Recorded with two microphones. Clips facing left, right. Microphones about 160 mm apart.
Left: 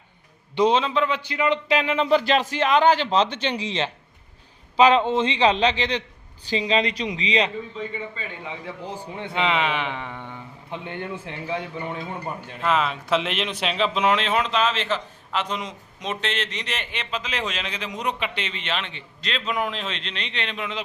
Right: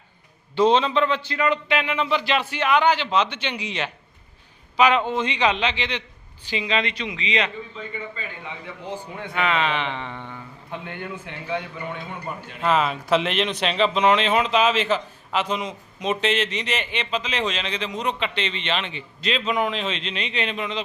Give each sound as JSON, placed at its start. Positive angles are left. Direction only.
{"t": 0.5, "sound": "a man's voice", "side_deg": 10}
{"t": 1.6, "sound": "speech", "side_deg": 35}
{"t": 9.1, "sound": "a man's voice", "side_deg": 25}
{"t": 10.8, "sound": "speech", "side_deg": 30}
{"t": 12.6, "sound": "speech", "side_deg": 0}